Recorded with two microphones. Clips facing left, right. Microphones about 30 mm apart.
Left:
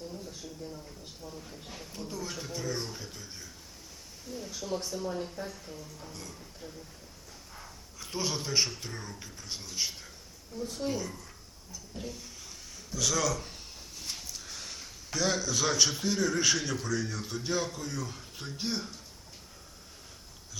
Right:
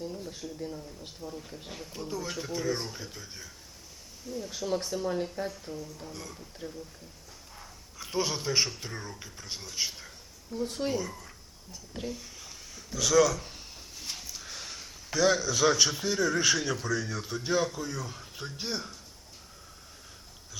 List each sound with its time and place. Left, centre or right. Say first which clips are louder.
1.7 s speech: right 4 dB; centre
4.8 s speech: right 3 dB; right
5.4 s a woman's voice: right 5 dB; right
6.1 s speech: right 3 dB; centre
7.9 s speech: right 3 dB; centre
10.6 s a woman's voice: right 4 dB; right
10.9 s speech: right 3 dB; centre
11.9 s a woman's voice: right 4 dB; right
13.0 s a man's voice: right 6 dB; centre